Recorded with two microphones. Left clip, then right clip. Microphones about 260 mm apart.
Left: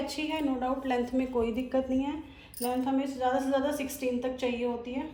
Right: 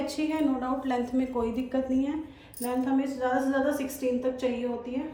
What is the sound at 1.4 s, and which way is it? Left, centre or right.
Speech, centre.